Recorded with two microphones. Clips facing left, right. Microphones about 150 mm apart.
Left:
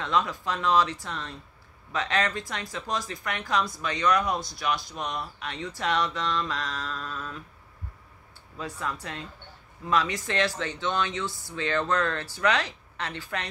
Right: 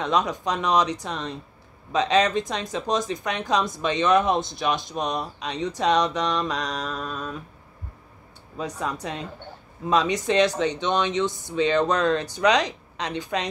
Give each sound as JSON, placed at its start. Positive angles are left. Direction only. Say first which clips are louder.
{"t": 0.0, "sound": "speech", "louder": "right 4 dB", "side_deg": -20}
{"t": 8.5, "sound": "speech", "louder": "right 5 dB", "side_deg": -20}